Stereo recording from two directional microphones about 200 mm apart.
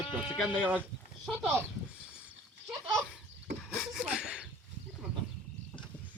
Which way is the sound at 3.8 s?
5° right (ahead or behind).